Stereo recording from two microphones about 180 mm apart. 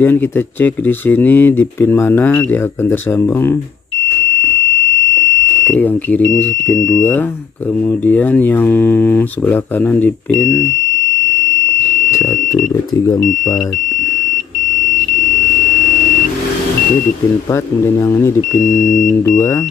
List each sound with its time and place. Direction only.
0.0 s speech: 10° left (ahead or behind)
5.7 s speech: 10° left (ahead or behind)
12.9 s speech: 20° left (ahead or behind)
17.8 s speech: 15° left (ahead or behind)